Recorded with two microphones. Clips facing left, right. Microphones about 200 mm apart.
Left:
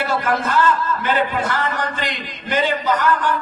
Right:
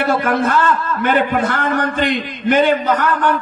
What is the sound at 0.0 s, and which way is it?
A man's voice, 60° right (ahead or behind).